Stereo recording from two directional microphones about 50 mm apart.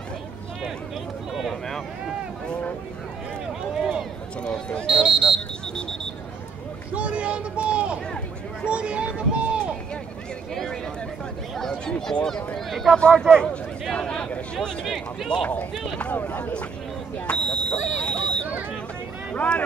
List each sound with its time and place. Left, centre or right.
1.3 s a sound: centre
4.5 s speech: centre
4.8 s speech: centre
6.9 s speech: right
8.6 s a sound: right
10.5 s a sound: centre
12.1 s speech: centre
12.5 s speech: centre
16.2 s speech: left
17.3 s speech: centre